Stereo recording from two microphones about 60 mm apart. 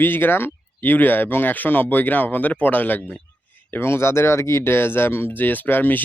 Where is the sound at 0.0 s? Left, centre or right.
Left.